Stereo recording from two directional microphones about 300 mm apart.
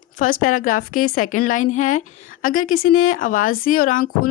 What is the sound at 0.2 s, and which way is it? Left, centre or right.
Speech, left.